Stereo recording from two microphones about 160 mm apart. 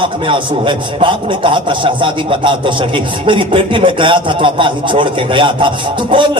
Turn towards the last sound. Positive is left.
turn(degrees=-30)  # may be behind; listen again after turning